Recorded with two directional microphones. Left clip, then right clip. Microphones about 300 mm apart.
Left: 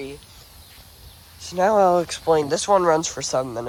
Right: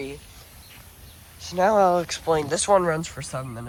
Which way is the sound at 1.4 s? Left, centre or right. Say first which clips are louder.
Left 1 dB; centre.